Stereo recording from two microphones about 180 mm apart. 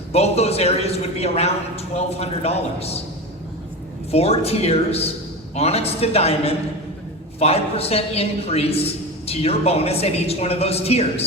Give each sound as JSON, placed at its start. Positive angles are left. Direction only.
{"t": 0.1, "sound": "a man's voice", "side_deg": 35}
{"t": 4.1, "sound": "a man's voice", "side_deg": 35}